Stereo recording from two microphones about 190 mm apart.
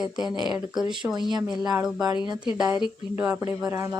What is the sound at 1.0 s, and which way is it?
Speech, 10° right (ahead or behind).